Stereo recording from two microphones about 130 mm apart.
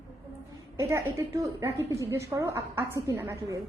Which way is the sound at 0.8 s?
20° right (ahead or behind).